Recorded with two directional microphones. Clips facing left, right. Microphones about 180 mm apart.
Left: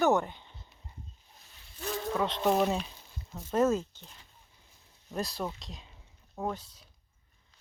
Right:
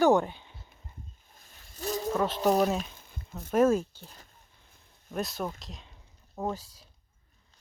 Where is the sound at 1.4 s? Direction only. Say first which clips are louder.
Right 3 dB; 40° right (ahead or behind).